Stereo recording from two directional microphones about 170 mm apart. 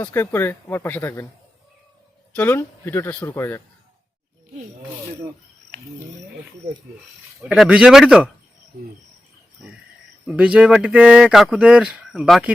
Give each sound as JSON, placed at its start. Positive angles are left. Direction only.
{"t": 0.0, "sound": "speech", "side_deg": 15}
{"t": 2.3, "sound": "speech", "side_deg": 10}
{"t": 7.4, "sound": "speech", "side_deg": 0}
{"t": 10.2, "sound": "speech", "side_deg": -5}